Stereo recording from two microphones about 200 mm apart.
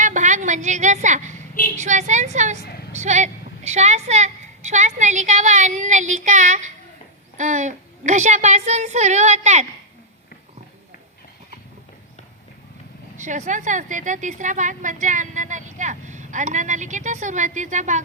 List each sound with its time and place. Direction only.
0.0 s a woman's voice: 40° right (ahead or behind)
13.1 s a woman's voice: 40° right (ahead or behind)